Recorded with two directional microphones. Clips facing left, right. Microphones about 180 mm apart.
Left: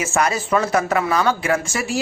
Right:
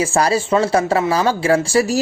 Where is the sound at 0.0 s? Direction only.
30° right (ahead or behind).